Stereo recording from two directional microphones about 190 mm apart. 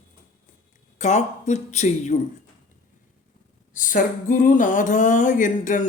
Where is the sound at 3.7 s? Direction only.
45° left (ahead or behind).